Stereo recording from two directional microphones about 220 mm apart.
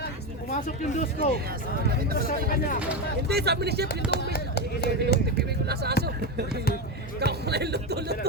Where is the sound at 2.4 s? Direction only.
40° left (ahead or behind).